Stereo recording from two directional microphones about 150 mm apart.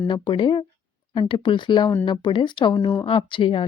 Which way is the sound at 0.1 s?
30° left (ahead or behind).